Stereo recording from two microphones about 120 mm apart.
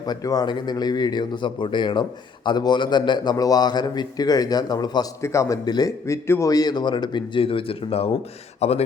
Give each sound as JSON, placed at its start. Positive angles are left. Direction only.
{"t": 0.0, "sound": "speech", "side_deg": 35}
{"t": 5.2, "sound": "speech", "side_deg": 25}
{"t": 8.6, "sound": "a man's voice", "side_deg": 65}